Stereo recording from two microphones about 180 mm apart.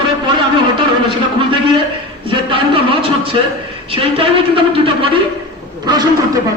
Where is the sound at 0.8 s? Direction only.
30° right (ahead or behind).